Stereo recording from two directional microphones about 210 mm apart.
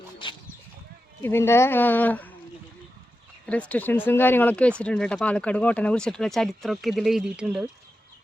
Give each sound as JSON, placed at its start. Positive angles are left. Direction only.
{"t": 0.2, "sound": "a sound", "side_deg": 20}
{"t": 1.2, "sound": "speech", "side_deg": 10}
{"t": 3.4, "sound": "speech", "side_deg": 5}